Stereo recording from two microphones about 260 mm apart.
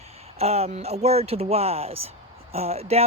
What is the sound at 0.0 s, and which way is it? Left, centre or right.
Speech, right.